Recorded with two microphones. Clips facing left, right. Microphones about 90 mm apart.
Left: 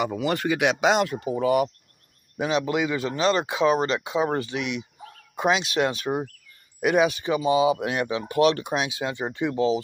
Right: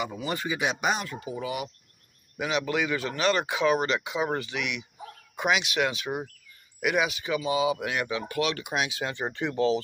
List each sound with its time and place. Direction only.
0.0 s speech: 65° left (ahead or behind); by 1.1 s 90° left
1.2 s speech: 45° left (ahead or behind)
2.3 s speech: 30° left (ahead or behind)